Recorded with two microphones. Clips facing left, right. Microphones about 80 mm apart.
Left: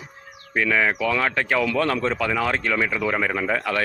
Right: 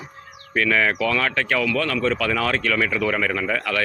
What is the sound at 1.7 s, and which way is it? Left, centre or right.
Speech, left.